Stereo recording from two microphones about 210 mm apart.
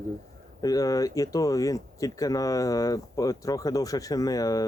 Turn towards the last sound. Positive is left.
turn(degrees=15)  # may be behind; listen again after turning